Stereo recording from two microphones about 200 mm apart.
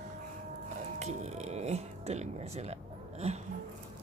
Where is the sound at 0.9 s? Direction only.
35° right (ahead or behind).